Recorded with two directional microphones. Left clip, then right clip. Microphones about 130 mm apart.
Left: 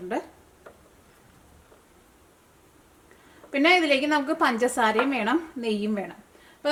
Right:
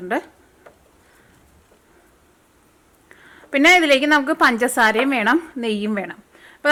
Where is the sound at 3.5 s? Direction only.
35° right (ahead or behind).